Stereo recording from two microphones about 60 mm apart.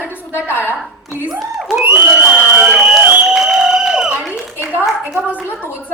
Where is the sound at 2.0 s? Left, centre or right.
Right.